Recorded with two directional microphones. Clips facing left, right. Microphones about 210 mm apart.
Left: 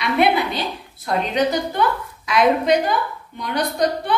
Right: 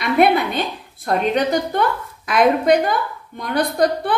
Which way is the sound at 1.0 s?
50° right (ahead or behind).